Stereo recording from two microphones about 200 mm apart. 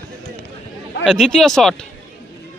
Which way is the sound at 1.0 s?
Centre (ahead or behind).